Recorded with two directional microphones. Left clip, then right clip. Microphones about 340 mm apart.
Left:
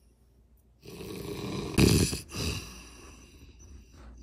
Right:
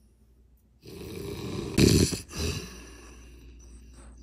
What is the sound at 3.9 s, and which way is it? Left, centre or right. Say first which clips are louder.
Music: right 1 dB; left.